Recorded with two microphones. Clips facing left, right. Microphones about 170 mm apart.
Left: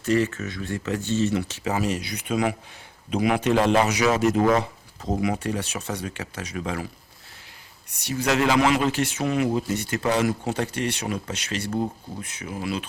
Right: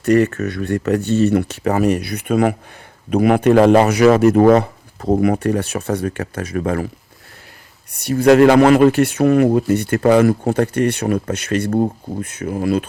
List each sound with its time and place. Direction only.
0.0 s speech: 60° right (ahead or behind)
8.0 s speech: 55° right (ahead or behind)